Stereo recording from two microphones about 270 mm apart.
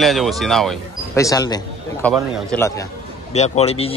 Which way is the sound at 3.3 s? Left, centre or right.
Left.